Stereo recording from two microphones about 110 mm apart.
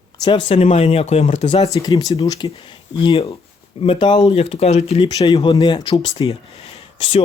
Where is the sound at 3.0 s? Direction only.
55° left (ahead or behind).